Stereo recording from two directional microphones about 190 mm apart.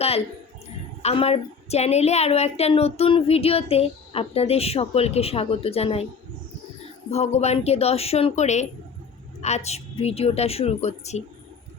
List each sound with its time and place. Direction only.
1.0 s a woman's voice: 30° left (ahead or behind)
7.1 s a woman's voice: 35° left (ahead or behind)